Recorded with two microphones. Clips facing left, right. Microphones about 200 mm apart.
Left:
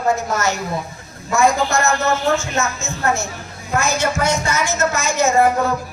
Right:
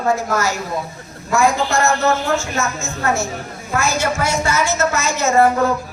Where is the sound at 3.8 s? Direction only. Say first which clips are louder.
Even; 20° left (ahead or behind).